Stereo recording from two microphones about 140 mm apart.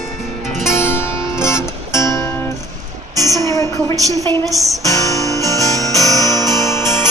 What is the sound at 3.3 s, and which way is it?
Music, 20° left (ahead or behind).